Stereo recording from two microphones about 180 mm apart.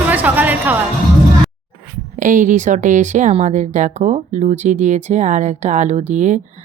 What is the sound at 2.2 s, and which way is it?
Speech, 45° right (ahead or behind).